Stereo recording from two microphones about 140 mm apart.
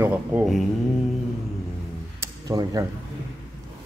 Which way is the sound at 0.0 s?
15° right (ahead or behind).